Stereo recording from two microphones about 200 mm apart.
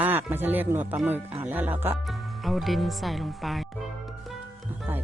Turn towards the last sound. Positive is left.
turn(degrees=0)  # may be behind; listen again after turning